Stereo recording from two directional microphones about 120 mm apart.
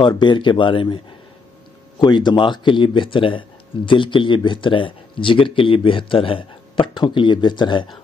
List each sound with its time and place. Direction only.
0.2 s speech: 40° left (ahead or behind)